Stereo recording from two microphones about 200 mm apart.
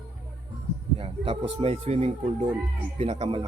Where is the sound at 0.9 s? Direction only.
25° right (ahead or behind).